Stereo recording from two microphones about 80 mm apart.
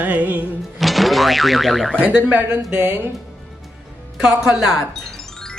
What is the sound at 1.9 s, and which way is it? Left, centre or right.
Speech, centre.